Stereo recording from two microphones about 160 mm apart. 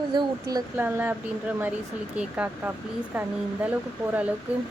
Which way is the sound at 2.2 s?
10° right (ahead or behind).